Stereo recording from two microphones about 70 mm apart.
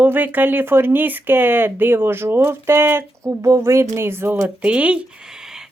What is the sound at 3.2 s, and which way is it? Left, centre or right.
Speech, right.